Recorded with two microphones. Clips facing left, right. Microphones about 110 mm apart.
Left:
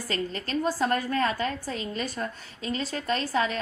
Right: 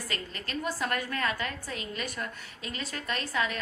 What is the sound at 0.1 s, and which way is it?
A woman's voice, 30° left (ahead or behind).